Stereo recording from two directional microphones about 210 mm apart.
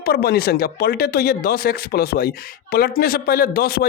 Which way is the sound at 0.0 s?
50° left (ahead or behind).